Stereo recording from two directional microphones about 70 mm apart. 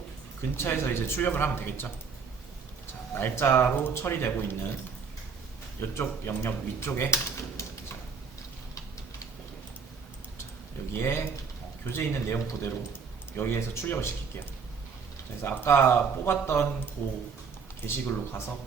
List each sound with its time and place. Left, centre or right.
0.5 s speech: left
5.9 s speech: left
10.9 s speech: left